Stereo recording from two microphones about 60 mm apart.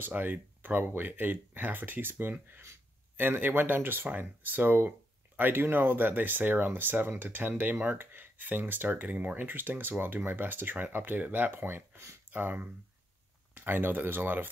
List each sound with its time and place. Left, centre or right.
0.0 s speech: right
12.3 s speech: right